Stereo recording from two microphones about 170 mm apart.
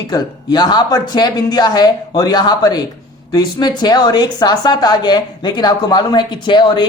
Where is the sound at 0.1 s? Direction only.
25° left (ahead or behind).